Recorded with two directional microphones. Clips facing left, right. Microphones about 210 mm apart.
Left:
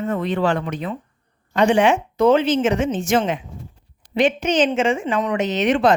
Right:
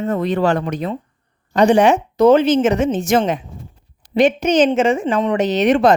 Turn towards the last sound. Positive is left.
turn(degrees=-40)  # may be behind; listen again after turning